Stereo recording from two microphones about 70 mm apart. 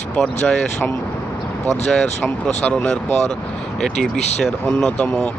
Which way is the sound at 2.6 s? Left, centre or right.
Centre.